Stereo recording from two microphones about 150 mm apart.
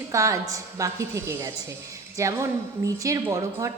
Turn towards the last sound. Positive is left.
turn(degrees=-20)  # may be behind; listen again after turning